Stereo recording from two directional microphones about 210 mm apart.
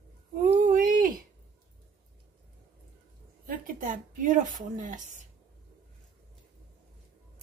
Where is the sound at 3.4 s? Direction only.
40° right (ahead or behind).